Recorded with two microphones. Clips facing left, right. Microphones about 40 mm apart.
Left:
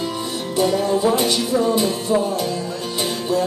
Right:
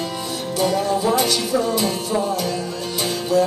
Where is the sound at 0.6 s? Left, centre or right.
Centre.